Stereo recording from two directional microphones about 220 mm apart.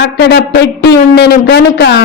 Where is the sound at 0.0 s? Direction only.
45° left (ahead or behind).